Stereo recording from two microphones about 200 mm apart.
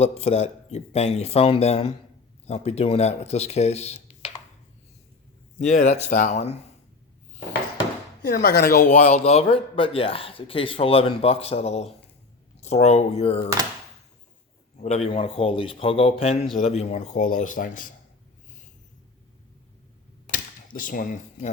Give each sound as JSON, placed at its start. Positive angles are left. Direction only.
{"t": 0.0, "sound": "a man's voice", "side_deg": 35}
{"t": 5.5, "sound": "a man's voice", "side_deg": 35}
{"t": 8.2, "sound": "a man's voice", "side_deg": 45}
{"t": 14.8, "sound": "a man's voice", "side_deg": 30}
{"t": 20.2, "sound": "a sound", "side_deg": 45}